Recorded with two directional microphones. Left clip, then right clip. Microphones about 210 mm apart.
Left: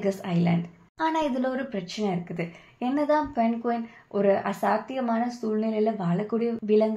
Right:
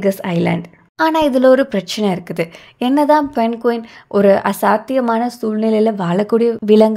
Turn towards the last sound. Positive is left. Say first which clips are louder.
# right 12 dB
turn(degrees=-55)  # may be behind; listen again after turning